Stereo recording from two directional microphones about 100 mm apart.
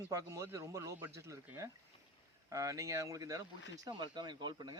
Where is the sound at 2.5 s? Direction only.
30° right (ahead or behind).